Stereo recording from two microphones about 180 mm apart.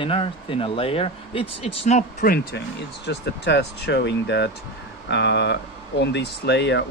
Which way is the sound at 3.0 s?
70° left (ahead or behind).